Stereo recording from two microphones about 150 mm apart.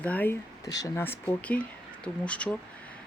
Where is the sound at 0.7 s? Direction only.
25° left (ahead or behind).